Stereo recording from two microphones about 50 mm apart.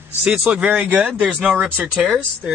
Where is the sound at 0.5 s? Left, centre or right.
Right.